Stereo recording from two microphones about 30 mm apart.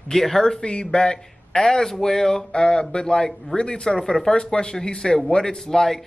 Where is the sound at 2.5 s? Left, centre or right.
Left.